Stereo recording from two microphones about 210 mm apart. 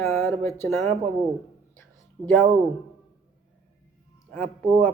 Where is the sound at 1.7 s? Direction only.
10° left (ahead or behind).